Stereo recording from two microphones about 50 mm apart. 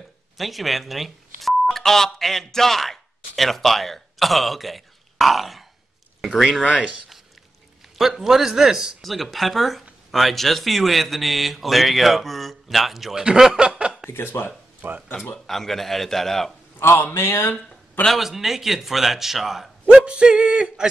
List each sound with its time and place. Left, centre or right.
0.4 s speech: centre
8.0 s a man's voice: centre
9.0 s speech: centre
13.2 s snicker: centre
14.1 s speech: left
14.8 s speech: right
15.3 s speech: centre
16.7 s speech: left
18.1 s speech: centre
19.9 s music: centre